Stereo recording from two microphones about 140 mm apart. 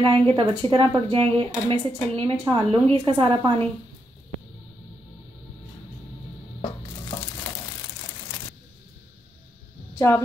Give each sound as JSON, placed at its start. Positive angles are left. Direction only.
{"t": 0.1, "sound": "a woman's voice", "side_deg": -35}
{"t": 9.9, "sound": "speech", "side_deg": 20}